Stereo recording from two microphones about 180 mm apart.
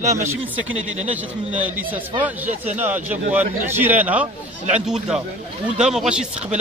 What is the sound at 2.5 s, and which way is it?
Speech, 40° right (ahead or behind).